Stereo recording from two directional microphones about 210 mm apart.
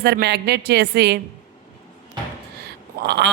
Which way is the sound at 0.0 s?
50° right (ahead or behind).